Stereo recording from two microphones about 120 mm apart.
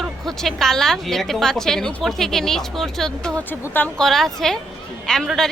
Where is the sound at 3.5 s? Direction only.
15° left (ahead or behind).